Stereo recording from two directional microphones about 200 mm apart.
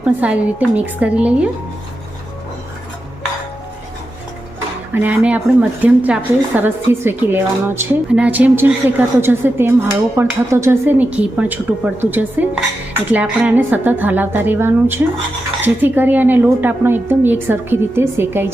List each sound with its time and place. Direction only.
0.0 s a woman's voice: 5° right (ahead or behind)
4.9 s a woman's voice: 10° right (ahead or behind)